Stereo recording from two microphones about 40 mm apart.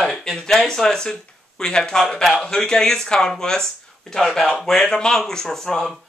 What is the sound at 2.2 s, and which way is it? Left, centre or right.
Speech, centre.